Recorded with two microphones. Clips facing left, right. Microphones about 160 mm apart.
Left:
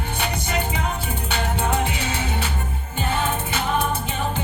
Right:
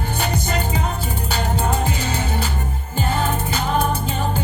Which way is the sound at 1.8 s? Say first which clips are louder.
Right 2 dB; 35° right (ahead or behind).